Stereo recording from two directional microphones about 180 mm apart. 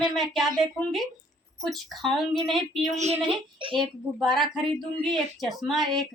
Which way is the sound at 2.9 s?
40° right (ahead or behind).